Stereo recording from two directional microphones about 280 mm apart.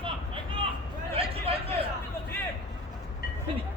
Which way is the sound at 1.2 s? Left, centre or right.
Centre.